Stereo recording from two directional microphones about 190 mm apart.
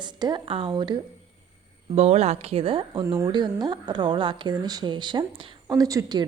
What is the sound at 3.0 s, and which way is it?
Speech, 15° right (ahead or behind).